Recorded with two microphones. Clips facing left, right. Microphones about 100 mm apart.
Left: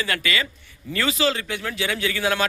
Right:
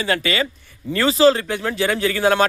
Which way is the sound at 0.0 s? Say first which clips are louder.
Right 5 dB; 30° right (ahead or behind).